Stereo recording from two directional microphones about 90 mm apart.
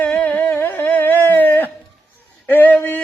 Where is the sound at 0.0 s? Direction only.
20° left (ahead or behind).